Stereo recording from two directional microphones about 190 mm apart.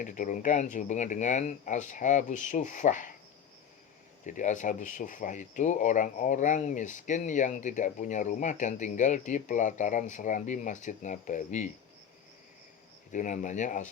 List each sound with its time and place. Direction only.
0.0 s speech: 40° left (ahead or behind)
4.3 s speech: 40° left (ahead or behind)
13.1 s speech: 40° left (ahead or behind)